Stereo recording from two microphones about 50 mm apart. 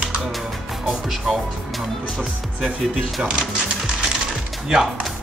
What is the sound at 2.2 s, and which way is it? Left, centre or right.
Speech, right.